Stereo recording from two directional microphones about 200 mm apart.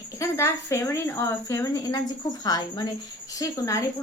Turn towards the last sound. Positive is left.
turn(degrees=15)  # may be behind; listen again after turning